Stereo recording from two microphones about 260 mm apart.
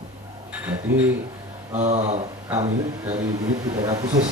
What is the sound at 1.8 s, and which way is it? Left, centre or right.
Speech, right.